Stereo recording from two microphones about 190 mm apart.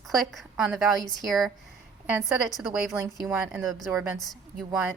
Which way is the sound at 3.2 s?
Centre (ahead or behind).